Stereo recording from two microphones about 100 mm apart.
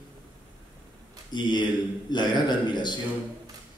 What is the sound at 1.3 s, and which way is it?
A man's voice, 45° left (ahead or behind).